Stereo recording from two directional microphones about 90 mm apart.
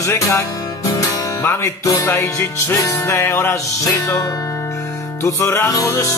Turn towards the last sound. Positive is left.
turn(degrees=35)  # may be behind; listen again after turning